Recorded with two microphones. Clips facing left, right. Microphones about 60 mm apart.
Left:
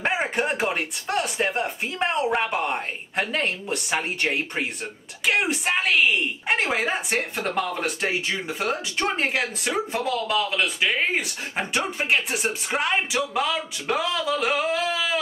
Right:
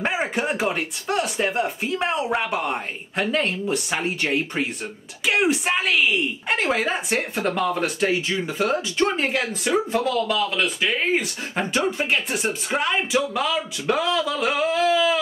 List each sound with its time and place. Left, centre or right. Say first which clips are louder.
0.0 s speech: even; centre